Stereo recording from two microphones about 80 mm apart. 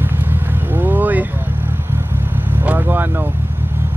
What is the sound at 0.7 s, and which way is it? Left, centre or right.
Vehicle, right.